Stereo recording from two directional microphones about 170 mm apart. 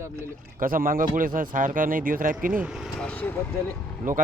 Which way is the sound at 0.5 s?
55° right (ahead or behind).